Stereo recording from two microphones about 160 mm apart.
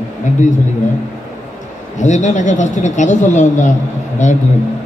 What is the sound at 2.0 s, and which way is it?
Speech, 50° left (ahead or behind).